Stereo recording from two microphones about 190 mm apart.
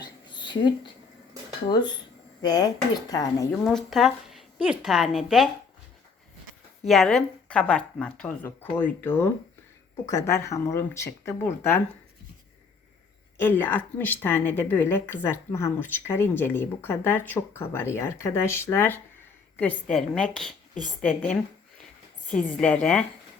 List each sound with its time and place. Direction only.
0.0 s a sound: 25° left (ahead or behind)
2.4 s speech: 20° left (ahead or behind)
3.6 s speech: centre (ahead or behind)
6.8 s a woman's voice: centre (ahead or behind)
13.4 s a woman's voice: 10° left (ahead or behind)
22.4 s speech: 5° left (ahead or behind)